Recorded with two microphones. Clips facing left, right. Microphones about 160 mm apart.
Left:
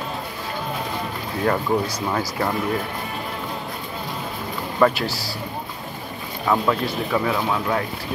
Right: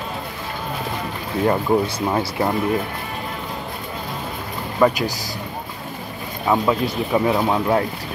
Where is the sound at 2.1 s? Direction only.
20° right (ahead or behind).